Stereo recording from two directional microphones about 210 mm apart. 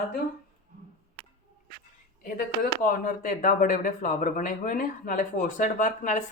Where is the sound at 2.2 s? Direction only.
40° left (ahead or behind).